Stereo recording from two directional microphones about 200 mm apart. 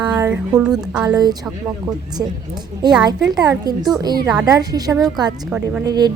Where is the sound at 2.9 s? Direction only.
Centre (ahead or behind).